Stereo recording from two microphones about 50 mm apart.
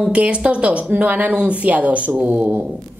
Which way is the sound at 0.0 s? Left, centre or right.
Right.